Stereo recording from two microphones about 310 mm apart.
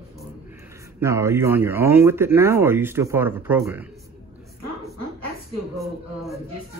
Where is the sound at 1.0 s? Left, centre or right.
Centre.